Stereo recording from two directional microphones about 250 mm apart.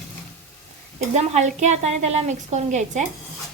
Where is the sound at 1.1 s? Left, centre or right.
Right.